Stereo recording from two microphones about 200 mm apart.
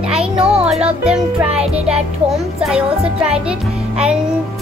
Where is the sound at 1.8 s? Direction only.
5° right (ahead or behind).